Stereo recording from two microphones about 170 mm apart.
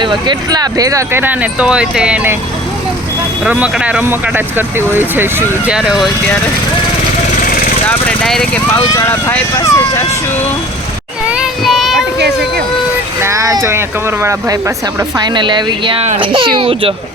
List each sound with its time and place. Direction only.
0.0 s speech: 25° right (ahead or behind); by 2.3 s 5° right (ahead or behind)
3.4 s speech: 5° right (ahead or behind)
7.3 s vehicle: 55° left (ahead or behind)
7.9 s speech: 5° left (ahead or behind)
11.3 s child singing: 5° right (ahead or behind)
13.2 s speech: 20° right (ahead or behind)